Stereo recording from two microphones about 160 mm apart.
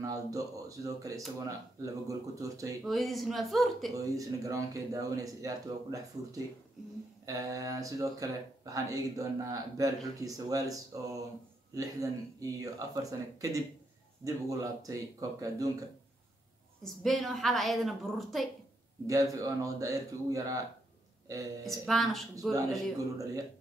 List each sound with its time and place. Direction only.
0.0 s speech: 20° right (ahead or behind)
2.8 s a woman's voice: centre (ahead or behind)
3.9 s speech: 20° right (ahead or behind)
16.8 s a woman's voice: centre (ahead or behind)
19.0 s speech: 20° right (ahead or behind)
21.6 s a woman's voice: centre (ahead or behind)